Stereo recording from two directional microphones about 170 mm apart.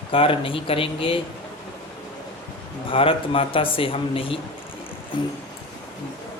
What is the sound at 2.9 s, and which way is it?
A man's voice, 30° left (ahead or behind).